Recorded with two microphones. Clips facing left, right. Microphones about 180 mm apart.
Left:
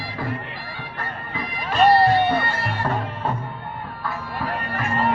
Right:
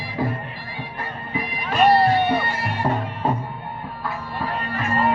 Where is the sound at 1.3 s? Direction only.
15° right (ahead or behind).